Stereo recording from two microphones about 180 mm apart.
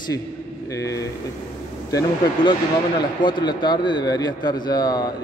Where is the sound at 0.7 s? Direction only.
20° left (ahead or behind).